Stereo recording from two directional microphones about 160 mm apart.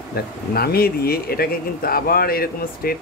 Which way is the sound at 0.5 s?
70° left (ahead or behind).